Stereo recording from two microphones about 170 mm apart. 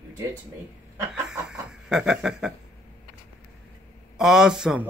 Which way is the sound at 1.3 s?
5° right (ahead or behind).